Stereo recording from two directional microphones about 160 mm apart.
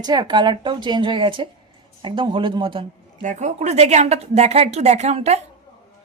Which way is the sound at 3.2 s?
50° right (ahead or behind).